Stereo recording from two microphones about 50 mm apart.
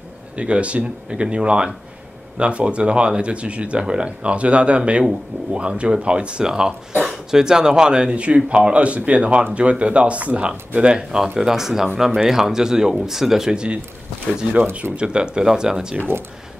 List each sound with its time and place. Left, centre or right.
0.4 s a man's voice: right
14.5 s speech: right
15.0 s speech: centre